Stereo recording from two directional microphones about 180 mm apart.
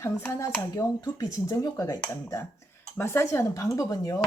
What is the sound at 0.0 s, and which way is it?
Speech, 15° left (ahead or behind).